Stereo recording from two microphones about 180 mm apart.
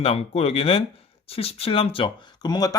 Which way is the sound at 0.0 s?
35° left (ahead or behind).